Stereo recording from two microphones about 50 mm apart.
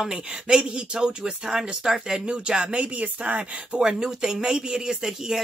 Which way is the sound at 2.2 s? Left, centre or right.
Right.